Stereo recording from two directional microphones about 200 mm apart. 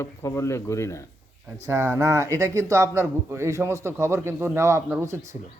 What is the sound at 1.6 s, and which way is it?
Speech, 10° right (ahead or behind).